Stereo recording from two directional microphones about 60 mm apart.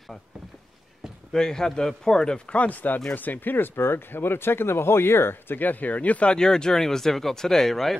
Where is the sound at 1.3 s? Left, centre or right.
Centre.